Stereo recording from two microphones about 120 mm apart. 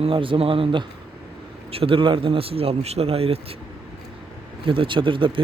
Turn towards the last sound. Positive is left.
turn(degrees=-45)  # may be behind; listen again after turning